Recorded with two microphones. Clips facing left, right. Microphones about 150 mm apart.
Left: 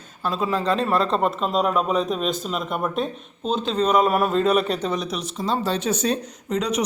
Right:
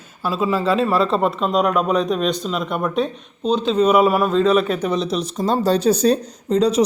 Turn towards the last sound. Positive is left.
turn(degrees=-30)  # may be behind; listen again after turning